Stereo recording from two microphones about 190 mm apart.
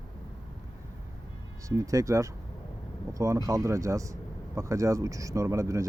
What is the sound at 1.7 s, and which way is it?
Speech, 15° right (ahead or behind).